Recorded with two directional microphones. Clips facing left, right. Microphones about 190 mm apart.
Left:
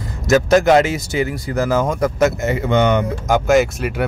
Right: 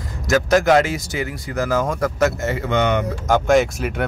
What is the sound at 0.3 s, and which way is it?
Speech, 25° left (ahead or behind).